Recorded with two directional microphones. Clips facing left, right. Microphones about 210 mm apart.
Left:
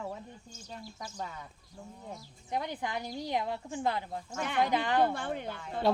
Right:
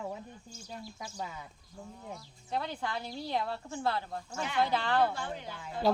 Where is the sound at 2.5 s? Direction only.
15° left (ahead or behind).